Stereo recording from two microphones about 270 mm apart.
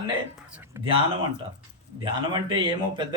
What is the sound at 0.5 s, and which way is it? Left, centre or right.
Speech, centre.